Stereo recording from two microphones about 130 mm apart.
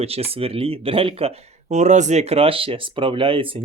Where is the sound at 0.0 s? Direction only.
50° right (ahead or behind).